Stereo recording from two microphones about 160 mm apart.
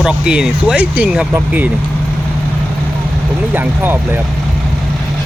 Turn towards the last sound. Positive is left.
turn(degrees=-10)  # may be behind; listen again after turning